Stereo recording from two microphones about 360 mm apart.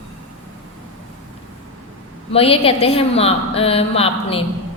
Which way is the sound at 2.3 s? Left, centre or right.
Centre.